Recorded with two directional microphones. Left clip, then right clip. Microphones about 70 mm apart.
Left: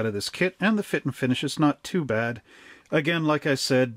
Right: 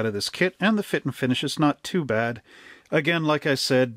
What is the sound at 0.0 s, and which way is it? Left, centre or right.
Speech, right.